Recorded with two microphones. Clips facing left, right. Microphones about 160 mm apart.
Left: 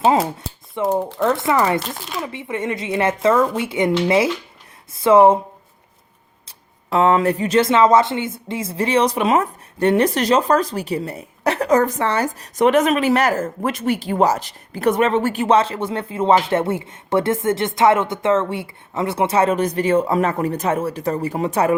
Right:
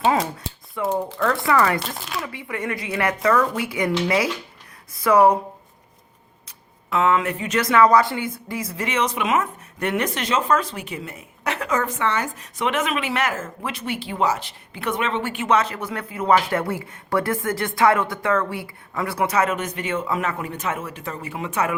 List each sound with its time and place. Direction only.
0.9 s speech: 25° left (ahead or behind)
1.8 s speech: centre (ahead or behind)
2.1 s speech: 25° left (ahead or behind)
4.9 s speech: 25° left (ahead or behind)
6.9 s speech: 35° left (ahead or behind)